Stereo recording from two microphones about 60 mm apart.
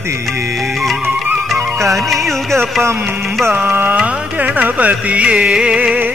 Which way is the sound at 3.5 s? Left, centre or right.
Right.